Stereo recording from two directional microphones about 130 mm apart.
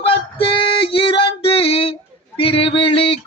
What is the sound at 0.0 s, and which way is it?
Female singing, 45° left (ahead or behind).